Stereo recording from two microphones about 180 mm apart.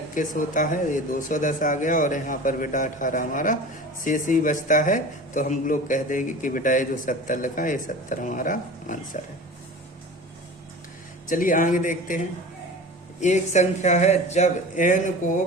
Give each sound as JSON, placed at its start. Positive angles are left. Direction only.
{"t": 0.1, "sound": "speech", "side_deg": 45}
{"t": 11.3, "sound": "speech", "side_deg": 50}